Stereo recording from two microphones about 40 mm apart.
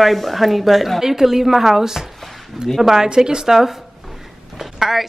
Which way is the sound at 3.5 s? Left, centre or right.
Centre.